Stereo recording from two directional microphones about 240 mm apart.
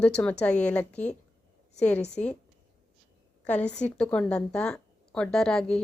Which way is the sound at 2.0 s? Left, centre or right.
Left.